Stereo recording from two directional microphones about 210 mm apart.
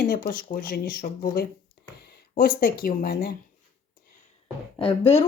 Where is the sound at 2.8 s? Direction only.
40° left (ahead or behind).